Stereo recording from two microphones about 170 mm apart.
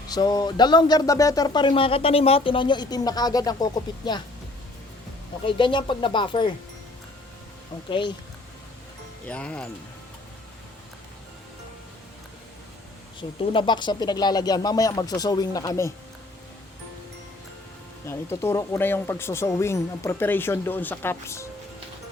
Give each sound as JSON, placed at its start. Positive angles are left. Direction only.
{"t": 0.1, "sound": "speech", "side_deg": 25}
{"t": 5.5, "sound": "speech", "side_deg": 30}
{"t": 7.9, "sound": "speech", "side_deg": 30}
{"t": 9.2, "sound": "speech", "side_deg": 5}
{"t": 13.1, "sound": "speech", "side_deg": 30}
{"t": 18.0, "sound": "speech", "side_deg": 15}